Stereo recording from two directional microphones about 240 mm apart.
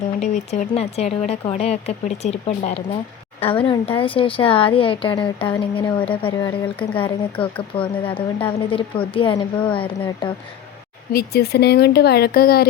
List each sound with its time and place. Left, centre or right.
0.2 s speech: left
11.1 s speech: left